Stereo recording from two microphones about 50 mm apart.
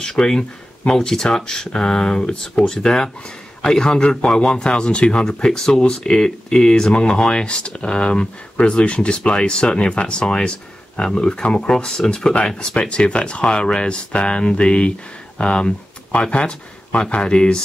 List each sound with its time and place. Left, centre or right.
0.0 s speech: centre